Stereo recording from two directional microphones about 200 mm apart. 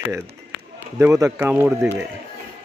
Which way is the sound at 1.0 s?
15° right (ahead or behind).